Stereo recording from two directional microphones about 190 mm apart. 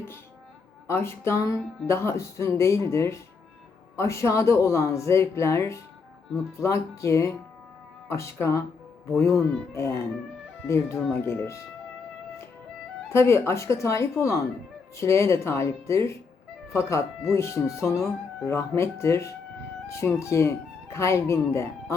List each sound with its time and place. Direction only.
0.9 s speech: 15° left (ahead or behind)
13.1 s speech: 15° left (ahead or behind)